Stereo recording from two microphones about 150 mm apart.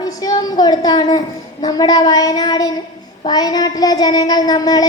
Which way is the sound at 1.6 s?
25° left (ahead or behind).